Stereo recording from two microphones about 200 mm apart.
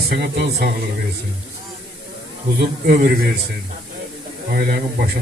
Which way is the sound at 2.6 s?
50° right (ahead or behind).